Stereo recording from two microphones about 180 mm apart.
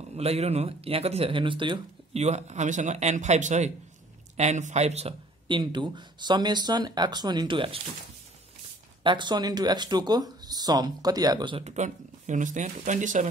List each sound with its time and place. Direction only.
0.1 s speech: 35° right (ahead or behind)
9.0 s speech: 25° right (ahead or behind); by 13.3 s 45° right (ahead or behind)